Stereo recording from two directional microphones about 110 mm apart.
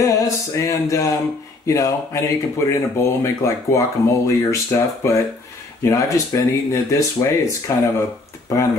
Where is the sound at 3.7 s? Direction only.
25° left (ahead or behind).